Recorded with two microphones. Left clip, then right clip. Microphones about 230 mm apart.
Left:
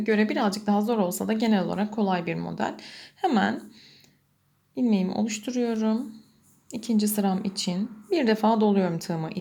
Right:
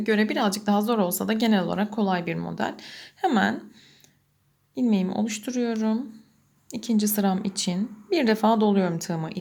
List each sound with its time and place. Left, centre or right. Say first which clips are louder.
0.0 s speech: right 1 dB; centre